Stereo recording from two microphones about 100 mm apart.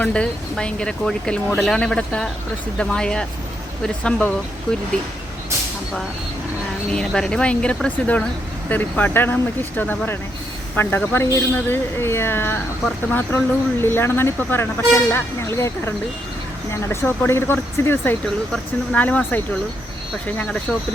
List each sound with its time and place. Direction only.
0.0 s speech: 10° left (ahead or behind)
6.9 s speech: 5° left (ahead or behind)